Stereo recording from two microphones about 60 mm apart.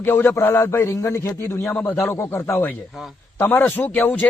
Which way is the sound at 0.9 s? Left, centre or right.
Left.